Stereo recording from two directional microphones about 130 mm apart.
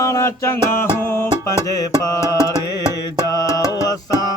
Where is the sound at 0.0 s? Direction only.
25° left (ahead or behind).